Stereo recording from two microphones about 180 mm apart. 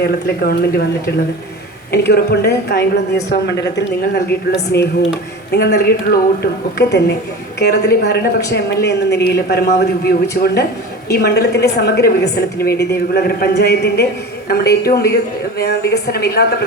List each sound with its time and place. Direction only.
0.0 s speech: 60° left (ahead or behind)